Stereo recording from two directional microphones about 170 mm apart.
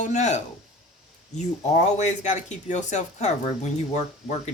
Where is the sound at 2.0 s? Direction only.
45° left (ahead or behind).